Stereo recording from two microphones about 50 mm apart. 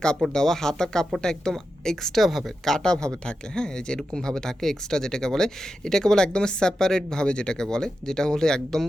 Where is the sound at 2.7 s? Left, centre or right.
Centre.